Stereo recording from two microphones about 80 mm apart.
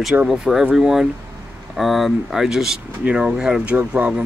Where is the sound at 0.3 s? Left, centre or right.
Centre.